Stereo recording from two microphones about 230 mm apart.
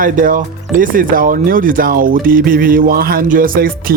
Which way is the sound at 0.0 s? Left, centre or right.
Right.